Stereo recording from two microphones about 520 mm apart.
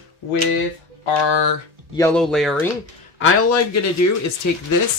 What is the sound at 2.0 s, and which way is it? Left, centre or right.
Speech, centre.